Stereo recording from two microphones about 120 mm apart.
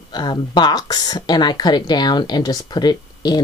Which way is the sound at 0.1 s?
35° left (ahead or behind).